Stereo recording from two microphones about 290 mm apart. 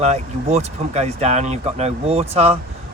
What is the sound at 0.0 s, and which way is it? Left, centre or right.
Speech, right.